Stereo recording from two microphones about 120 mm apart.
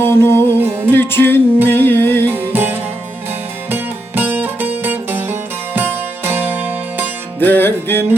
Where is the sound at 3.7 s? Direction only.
15° right (ahead or behind).